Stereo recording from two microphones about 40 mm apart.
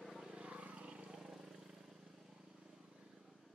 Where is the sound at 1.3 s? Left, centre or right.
Centre.